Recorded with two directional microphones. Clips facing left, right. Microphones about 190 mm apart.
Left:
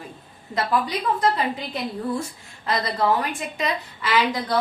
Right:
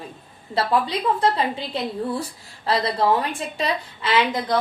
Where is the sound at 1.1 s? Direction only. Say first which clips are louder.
Right 1 dB; 30° right (ahead or behind).